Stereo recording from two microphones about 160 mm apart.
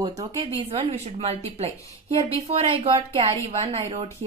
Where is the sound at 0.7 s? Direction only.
40° right (ahead or behind).